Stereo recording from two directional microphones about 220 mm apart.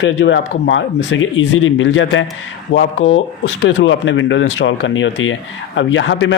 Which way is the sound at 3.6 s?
55° left (ahead or behind).